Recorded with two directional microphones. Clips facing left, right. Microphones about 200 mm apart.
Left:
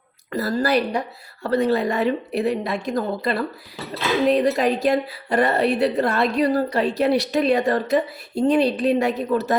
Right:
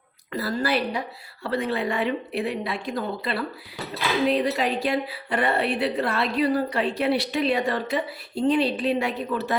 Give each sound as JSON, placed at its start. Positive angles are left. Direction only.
{"t": 0.3, "sound": "a woman's voice", "side_deg": 40}